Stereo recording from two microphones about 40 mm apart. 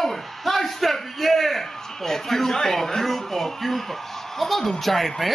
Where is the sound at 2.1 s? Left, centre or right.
Centre.